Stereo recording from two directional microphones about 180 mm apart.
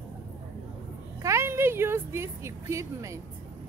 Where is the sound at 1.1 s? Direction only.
15° right (ahead or behind).